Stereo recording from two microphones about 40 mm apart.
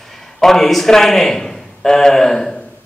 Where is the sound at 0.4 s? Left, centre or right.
Centre.